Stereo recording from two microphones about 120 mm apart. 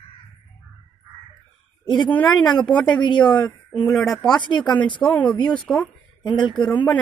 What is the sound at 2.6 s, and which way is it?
A woman's voice, 10° left (ahead or behind).